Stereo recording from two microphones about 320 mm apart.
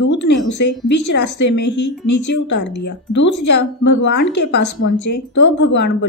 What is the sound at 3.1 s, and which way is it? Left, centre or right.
Speech, left.